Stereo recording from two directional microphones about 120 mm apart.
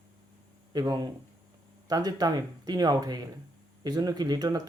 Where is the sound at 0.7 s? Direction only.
35° right (ahead or behind).